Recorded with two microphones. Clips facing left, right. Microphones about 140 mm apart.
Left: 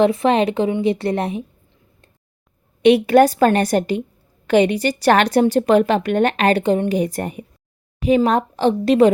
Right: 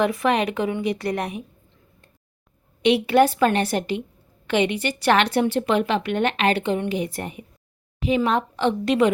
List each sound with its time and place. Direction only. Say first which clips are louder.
0.0 s a woman's voice: left 5 dB; 25° left (ahead or behind)
2.8 s a woman's voice: left 5 dB; 45° left (ahead or behind)